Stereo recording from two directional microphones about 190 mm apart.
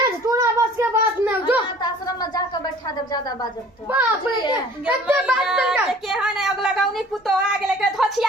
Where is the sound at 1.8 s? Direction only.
20° left (ahead or behind).